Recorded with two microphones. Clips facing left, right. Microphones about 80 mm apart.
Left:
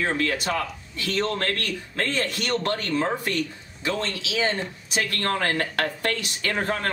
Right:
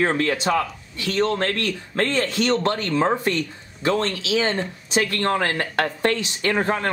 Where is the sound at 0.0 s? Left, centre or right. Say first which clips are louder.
Right 4 dB; right.